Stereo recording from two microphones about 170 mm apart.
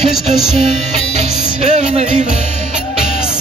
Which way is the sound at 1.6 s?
40° right (ahead or behind).